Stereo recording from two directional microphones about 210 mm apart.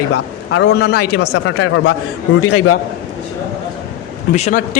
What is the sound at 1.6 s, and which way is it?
Speech, 65° left (ahead or behind).